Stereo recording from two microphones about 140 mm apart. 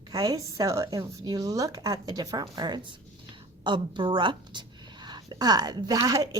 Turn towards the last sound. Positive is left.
turn(degrees=-25)  # may be behind; listen again after turning